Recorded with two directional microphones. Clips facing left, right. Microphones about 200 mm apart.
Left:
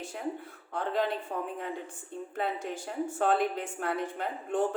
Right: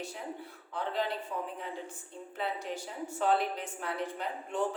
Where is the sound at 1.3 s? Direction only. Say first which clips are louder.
Left 3 dB; 50° left (ahead or behind).